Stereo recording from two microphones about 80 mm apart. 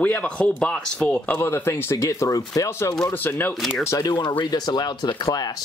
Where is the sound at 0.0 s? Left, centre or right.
Centre.